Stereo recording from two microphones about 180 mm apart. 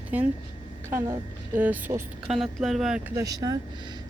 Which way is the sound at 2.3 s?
Centre (ahead or behind).